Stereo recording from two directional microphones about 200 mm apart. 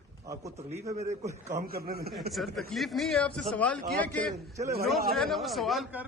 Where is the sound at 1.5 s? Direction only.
50° right (ahead or behind).